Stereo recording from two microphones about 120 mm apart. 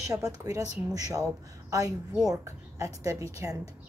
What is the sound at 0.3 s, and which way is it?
Speech, 30° right (ahead or behind).